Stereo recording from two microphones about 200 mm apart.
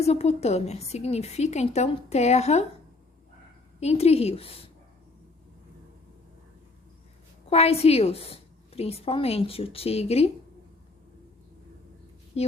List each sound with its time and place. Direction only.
0.0 s a woman's voice: 30° left (ahead or behind)
3.8 s a woman's voice: 30° left (ahead or behind)
7.5 s a woman's voice: 30° left (ahead or behind)
12.4 s a woman's voice: 30° left (ahead or behind)